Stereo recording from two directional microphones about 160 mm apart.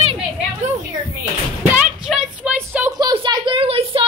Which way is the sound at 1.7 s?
5° right (ahead or behind).